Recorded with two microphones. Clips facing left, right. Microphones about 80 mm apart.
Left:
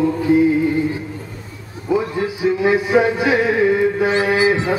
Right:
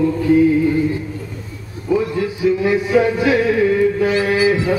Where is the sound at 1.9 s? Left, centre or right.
Left.